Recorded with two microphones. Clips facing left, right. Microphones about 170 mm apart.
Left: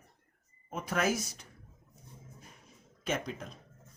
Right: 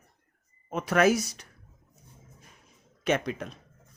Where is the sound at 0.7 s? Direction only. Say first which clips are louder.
Right 8 dB; 75° right (ahead or behind).